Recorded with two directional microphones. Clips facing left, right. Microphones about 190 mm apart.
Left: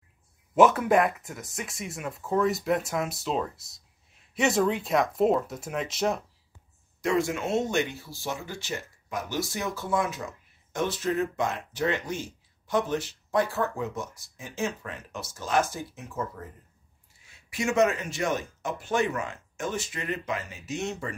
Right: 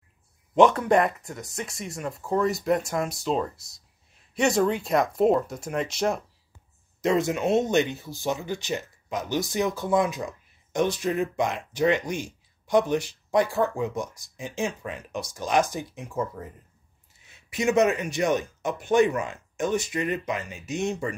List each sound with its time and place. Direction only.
0.6 s speech: 5° left (ahead or behind)
7.0 s speech: 20° right (ahead or behind)